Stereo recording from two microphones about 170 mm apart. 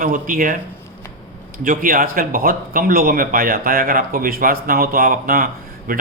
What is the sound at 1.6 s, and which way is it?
Speech, 55° right (ahead or behind).